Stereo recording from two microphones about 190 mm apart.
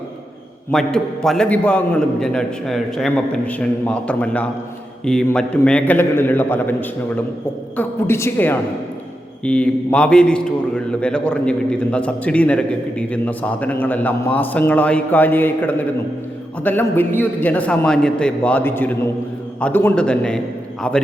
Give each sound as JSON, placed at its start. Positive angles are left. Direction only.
{"t": 0.7, "sound": "a man's voice", "side_deg": 5}